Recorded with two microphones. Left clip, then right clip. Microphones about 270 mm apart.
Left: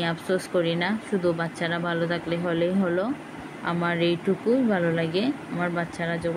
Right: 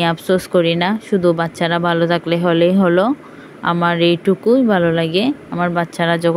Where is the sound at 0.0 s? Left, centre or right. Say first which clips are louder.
Right 10 dB; right.